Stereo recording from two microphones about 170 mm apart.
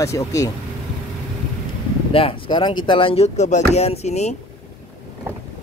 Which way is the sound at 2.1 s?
30° left (ahead or behind).